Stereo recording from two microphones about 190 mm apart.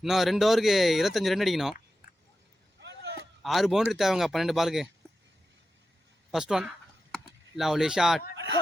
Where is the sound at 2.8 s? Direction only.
65° right (ahead or behind).